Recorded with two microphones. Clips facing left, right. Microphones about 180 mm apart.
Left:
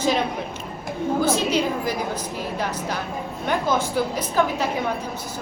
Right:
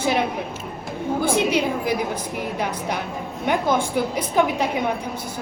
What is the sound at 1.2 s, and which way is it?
Speech, 15° right (ahead or behind).